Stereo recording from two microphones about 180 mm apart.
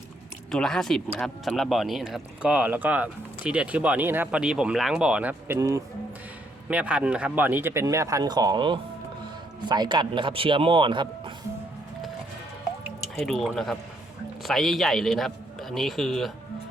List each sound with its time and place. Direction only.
0.5 s speech: centre (ahead or behind); by 5.8 s 15° right (ahead or behind)
6.7 s a man's voice: 5° right (ahead or behind); by 11.3 s 25° right (ahead or behind)
13.1 s speech: centre (ahead or behind)